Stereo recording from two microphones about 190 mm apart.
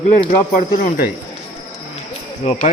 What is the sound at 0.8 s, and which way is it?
Speech, 45° left (ahead or behind).